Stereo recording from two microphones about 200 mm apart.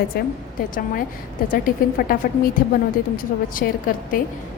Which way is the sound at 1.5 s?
45° left (ahead or behind).